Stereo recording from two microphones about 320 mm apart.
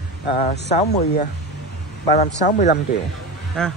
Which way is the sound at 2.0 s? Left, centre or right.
Left.